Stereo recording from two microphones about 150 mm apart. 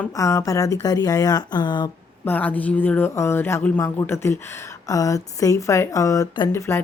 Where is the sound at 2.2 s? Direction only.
10° left (ahead or behind).